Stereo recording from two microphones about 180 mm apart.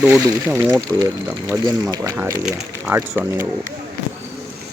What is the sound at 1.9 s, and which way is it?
Speech, 20° right (ahead or behind).